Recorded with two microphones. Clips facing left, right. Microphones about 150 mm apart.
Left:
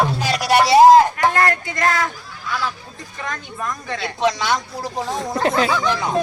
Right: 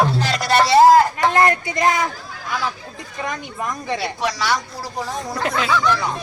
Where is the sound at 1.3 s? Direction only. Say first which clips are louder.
Right 2 dB; 20° right (ahead or behind).